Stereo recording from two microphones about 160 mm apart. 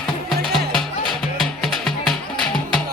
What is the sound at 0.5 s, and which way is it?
Music, centre (ahead or behind).